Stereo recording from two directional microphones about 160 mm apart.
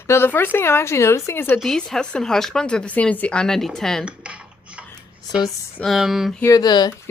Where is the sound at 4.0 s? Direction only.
5° right (ahead or behind).